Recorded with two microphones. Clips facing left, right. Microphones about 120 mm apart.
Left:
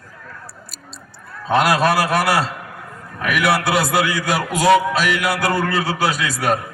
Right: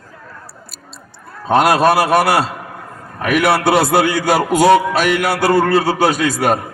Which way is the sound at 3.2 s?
45° right (ahead or behind).